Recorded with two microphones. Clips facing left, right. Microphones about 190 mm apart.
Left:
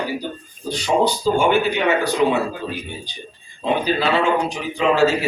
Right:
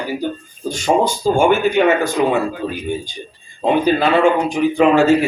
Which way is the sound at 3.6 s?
50° right (ahead or behind).